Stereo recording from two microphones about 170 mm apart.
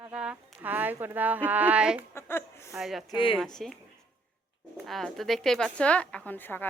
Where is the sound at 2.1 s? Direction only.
15° left (ahead or behind).